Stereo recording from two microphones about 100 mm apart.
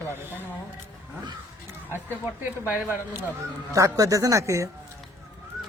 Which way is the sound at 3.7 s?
35° right (ahead or behind).